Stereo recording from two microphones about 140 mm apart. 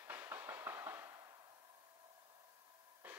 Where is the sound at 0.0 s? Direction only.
15° right (ahead or behind).